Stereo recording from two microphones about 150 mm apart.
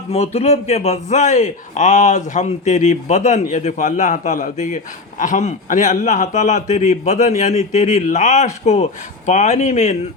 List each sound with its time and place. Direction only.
0.1 s a man's voice: 45° left (ahead or behind)